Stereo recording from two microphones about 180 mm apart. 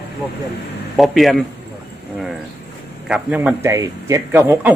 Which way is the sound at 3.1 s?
5° right (ahead or behind).